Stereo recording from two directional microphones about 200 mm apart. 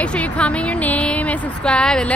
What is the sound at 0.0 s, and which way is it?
Speech, 5° left (ahead or behind).